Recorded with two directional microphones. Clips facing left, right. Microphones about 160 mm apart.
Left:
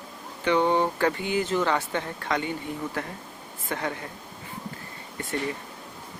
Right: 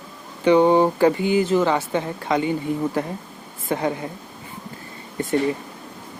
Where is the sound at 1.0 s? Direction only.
10° right (ahead or behind).